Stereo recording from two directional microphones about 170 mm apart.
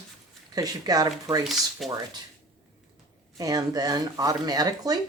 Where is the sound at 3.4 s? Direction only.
20° right (ahead or behind).